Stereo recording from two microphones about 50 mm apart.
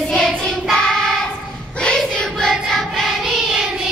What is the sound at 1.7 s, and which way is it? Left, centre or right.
Child singing, centre.